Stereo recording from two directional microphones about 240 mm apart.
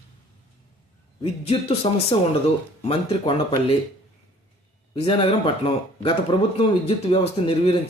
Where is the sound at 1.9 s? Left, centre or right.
Left.